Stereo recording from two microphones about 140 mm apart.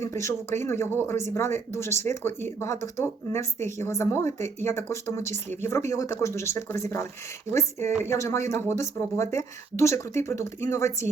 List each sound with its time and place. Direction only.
0.0 s speech: 20° left (ahead or behind)